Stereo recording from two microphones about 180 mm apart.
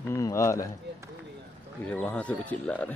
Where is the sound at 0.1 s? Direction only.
15° left (ahead or behind).